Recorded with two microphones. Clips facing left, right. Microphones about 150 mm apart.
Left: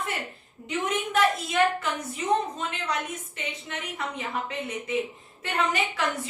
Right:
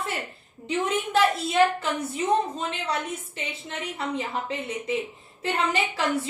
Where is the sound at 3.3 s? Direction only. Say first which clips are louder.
Right 1 dB; 30° right (ahead or behind).